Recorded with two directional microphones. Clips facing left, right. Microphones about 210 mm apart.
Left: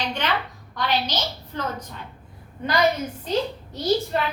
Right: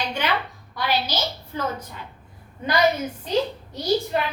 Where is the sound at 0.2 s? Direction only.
10° right (ahead or behind).